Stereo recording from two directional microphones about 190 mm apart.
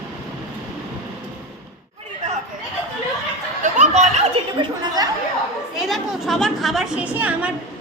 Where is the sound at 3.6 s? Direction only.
40° right (ahead or behind).